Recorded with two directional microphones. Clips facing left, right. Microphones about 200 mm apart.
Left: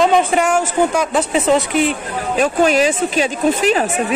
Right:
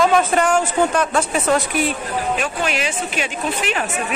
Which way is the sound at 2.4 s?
40° left (ahead or behind).